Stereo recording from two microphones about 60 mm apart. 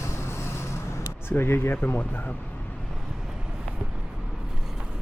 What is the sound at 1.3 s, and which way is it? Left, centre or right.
Speech, left.